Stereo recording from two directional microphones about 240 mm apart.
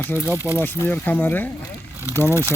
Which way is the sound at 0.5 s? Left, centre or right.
Centre.